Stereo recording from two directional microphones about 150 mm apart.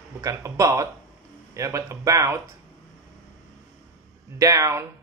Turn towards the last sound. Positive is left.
turn(degrees=-20)  # may be behind; listen again after turning